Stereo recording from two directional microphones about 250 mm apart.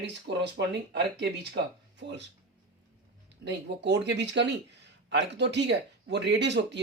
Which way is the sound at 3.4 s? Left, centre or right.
Right.